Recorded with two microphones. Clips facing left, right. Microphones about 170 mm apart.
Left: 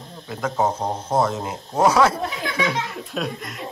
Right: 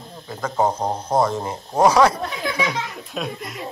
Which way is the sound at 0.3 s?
Centre (ahead or behind).